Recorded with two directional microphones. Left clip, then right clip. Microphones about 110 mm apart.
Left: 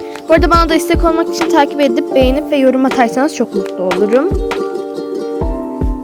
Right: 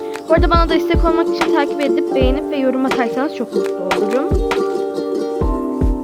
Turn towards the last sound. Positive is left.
turn(degrees=0)  # may be behind; listen again after turning